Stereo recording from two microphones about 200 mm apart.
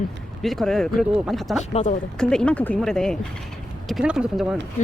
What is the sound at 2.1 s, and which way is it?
Speech, 5° left (ahead or behind).